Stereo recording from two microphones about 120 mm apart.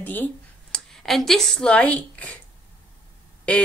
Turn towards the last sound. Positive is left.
turn(degrees=10)  # may be behind; listen again after turning